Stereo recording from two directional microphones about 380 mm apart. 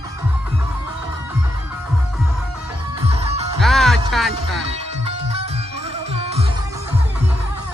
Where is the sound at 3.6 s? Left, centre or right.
Centre.